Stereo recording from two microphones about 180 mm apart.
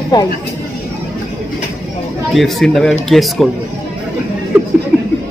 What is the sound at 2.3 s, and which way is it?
Speech, centre (ahead or behind).